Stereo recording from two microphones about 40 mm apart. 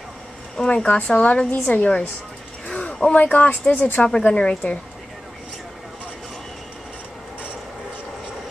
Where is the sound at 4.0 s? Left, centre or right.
Centre.